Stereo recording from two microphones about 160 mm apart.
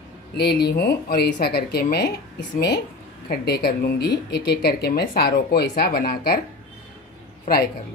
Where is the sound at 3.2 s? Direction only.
80° left.